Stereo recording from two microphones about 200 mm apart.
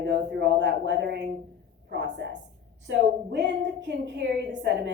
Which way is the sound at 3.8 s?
60° right (ahead or behind).